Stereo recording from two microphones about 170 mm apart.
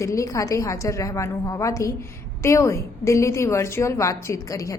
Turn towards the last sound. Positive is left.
turn(degrees=20)  # may be behind; listen again after turning